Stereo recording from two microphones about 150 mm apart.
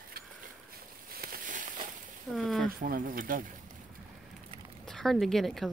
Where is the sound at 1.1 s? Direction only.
75° right (ahead or behind).